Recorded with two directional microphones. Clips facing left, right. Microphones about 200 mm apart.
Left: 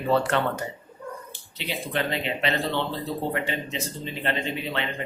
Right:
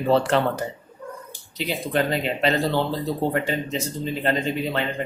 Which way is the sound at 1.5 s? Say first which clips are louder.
Right 5 dB; 40° right (ahead or behind).